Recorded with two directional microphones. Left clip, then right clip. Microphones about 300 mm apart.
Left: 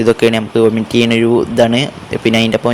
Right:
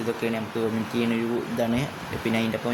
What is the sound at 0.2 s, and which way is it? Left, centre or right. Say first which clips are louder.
Speech: left 16 dB; right.